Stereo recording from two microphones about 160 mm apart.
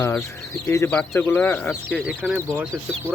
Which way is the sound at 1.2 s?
10° left (ahead or behind).